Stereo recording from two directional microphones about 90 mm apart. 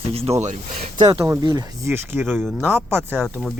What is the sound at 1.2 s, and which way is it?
Speech, 35° right (ahead or behind).